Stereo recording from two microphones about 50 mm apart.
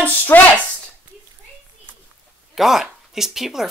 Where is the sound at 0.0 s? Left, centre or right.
Left.